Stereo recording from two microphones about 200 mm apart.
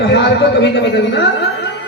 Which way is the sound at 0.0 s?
60° left (ahead or behind).